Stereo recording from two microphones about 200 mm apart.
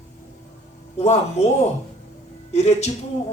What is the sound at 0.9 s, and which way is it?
Speech, 35° left (ahead or behind).